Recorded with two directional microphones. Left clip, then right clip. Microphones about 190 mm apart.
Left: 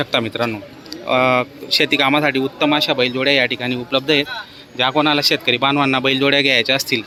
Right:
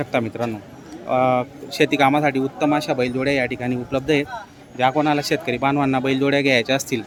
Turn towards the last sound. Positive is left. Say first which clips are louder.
# left 3 dB
turn(degrees=-10)  # may be behind; listen again after turning